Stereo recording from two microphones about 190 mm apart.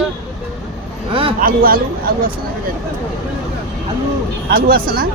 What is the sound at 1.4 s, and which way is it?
Speech, 50° right (ahead or behind).